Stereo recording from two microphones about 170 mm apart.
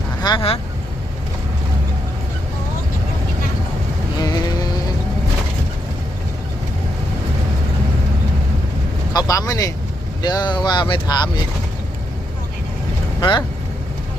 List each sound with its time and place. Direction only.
0.2 s speech: 25° left (ahead or behind)
4.2 s a sound: 25° left (ahead or behind)
9.1 s speech: 25° left (ahead or behind)
13.1 s speech: 25° left (ahead or behind)